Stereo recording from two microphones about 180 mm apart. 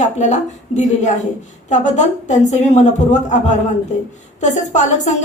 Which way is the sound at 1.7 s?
40° left (ahead or behind).